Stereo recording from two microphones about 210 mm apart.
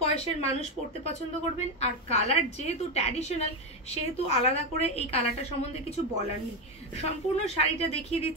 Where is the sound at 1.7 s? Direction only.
30° left (ahead or behind).